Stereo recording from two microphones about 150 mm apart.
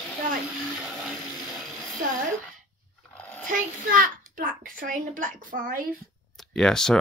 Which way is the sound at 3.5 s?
65° right (ahead or behind).